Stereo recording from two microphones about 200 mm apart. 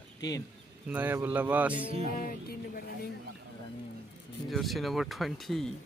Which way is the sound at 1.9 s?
45° left (ahead or behind).